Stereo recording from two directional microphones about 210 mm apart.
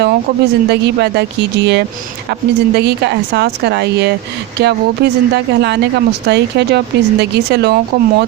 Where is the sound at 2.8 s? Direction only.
55° right (ahead or behind).